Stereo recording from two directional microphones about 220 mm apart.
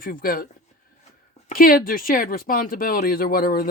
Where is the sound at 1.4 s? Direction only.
40° left (ahead or behind).